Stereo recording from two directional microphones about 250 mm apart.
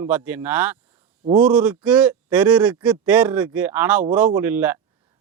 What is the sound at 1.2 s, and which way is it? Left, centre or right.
Speech, right.